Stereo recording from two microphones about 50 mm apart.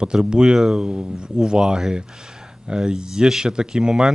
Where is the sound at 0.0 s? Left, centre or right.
Centre.